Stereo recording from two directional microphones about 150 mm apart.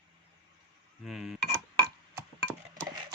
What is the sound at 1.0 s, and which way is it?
Speech, 5° right (ahead or behind).